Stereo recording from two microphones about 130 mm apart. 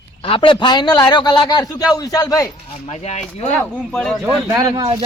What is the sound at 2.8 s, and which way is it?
Speech, 55° left (ahead or behind).